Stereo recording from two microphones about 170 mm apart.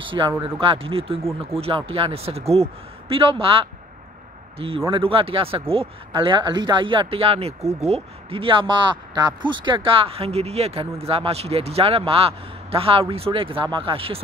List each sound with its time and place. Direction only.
0.0 s speech: 30° right (ahead or behind)